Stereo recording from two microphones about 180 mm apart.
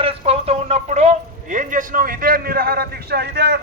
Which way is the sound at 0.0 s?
35° right (ahead or behind).